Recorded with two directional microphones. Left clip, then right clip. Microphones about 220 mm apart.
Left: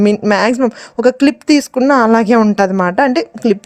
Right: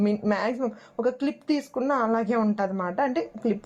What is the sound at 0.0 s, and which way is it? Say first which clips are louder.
A woman's voice: left 14 dB; 30° left (ahead or behind).